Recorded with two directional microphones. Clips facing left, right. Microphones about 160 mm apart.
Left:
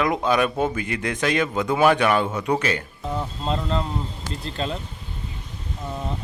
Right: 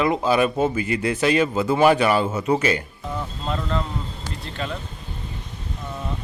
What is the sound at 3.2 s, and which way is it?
Speech, 25° left (ahead or behind).